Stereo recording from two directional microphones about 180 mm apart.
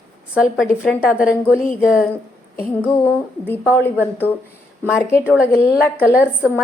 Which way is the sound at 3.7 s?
10° left (ahead or behind).